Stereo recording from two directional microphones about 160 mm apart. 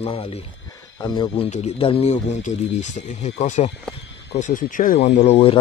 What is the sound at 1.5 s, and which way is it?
Speech, 40° left (ahead or behind).